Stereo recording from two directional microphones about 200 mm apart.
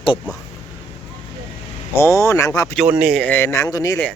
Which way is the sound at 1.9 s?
15° left (ahead or behind).